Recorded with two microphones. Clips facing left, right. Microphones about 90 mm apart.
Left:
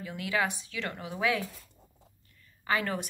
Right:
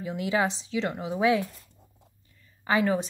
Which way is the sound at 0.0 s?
25° right (ahead or behind).